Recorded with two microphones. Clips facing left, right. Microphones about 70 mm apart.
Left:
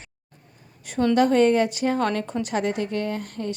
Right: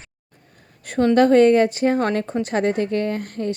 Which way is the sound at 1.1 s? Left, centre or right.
Right.